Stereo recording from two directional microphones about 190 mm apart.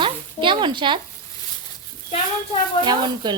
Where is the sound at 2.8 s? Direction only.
25° right (ahead or behind).